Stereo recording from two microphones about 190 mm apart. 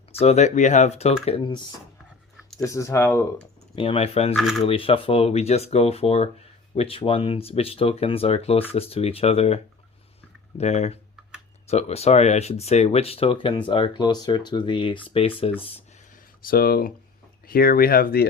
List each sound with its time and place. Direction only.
0.1 s speech: 35° left (ahead or behind)
2.6 s speech: 15° left (ahead or behind)
3.8 s speech: 30° left (ahead or behind)
10.6 s speech: 35° left (ahead or behind)
16.4 s speech: 50° left (ahead or behind)